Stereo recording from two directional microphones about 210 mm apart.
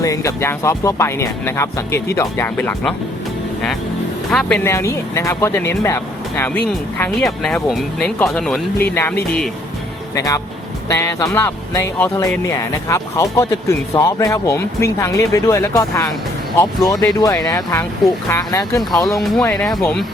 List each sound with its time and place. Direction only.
0.0 s speech: 15° left (ahead or behind)
4.3 s speech: 5° left (ahead or behind)
19.1 s speech: centre (ahead or behind)